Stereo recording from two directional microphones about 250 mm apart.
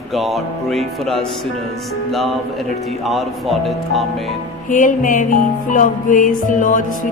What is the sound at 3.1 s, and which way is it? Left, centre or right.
Music, centre.